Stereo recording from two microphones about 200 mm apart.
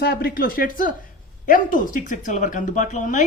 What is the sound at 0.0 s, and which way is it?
Speech, 50° left (ahead or behind).